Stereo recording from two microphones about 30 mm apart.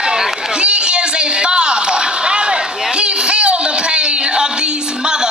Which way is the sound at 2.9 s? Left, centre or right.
Right.